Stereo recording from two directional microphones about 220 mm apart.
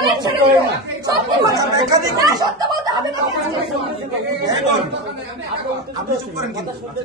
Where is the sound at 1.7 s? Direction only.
15° right (ahead or behind).